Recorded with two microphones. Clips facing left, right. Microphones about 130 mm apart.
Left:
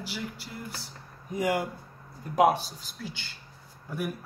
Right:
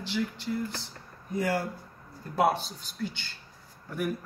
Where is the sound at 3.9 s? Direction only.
5° left (ahead or behind).